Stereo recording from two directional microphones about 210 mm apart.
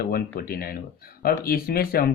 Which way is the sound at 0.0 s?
45° left (ahead or behind).